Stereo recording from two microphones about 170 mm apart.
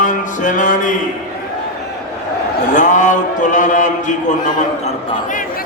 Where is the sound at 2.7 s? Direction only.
45° left (ahead or behind).